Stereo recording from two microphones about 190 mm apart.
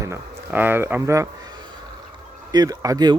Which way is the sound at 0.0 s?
10° right (ahead or behind).